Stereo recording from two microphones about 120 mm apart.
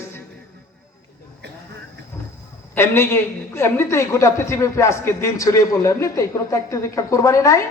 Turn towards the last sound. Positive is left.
turn(degrees=25)  # may be behind; listen again after turning